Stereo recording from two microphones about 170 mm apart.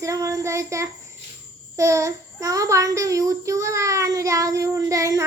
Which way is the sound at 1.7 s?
15° right (ahead or behind).